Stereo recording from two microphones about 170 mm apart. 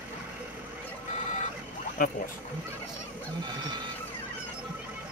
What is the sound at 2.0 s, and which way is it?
Speech, 55° left (ahead or behind).